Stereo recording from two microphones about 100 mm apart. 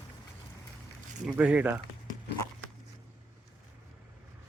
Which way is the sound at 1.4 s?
15° right (ahead or behind).